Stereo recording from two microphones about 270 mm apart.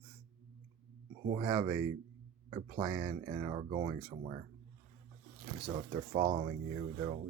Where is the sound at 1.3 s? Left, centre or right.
Centre.